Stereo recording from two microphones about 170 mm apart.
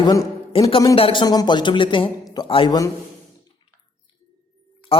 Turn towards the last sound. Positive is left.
turn(degrees=35)  # may be behind; listen again after turning